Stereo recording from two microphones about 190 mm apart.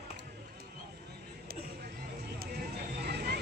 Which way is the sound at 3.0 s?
60° right (ahead or behind).